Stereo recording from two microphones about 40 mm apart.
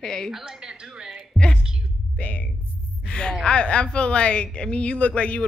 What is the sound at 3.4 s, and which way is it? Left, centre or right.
A woman's voice, left.